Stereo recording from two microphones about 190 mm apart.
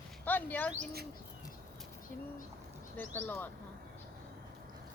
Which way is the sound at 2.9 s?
10° left (ahead or behind).